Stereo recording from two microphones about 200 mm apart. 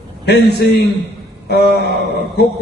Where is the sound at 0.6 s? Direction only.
50° left (ahead or behind).